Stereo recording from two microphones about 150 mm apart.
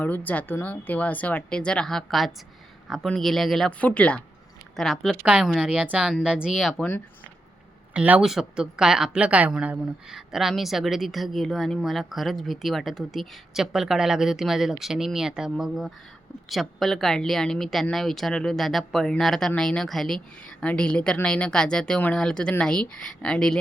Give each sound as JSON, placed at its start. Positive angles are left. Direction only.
{"t": 0.0, "sound": "speech", "side_deg": 10}
{"t": 7.9, "sound": "speech", "side_deg": -10}